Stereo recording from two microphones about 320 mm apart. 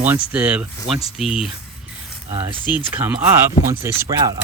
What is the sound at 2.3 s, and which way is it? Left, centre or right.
Speech, centre.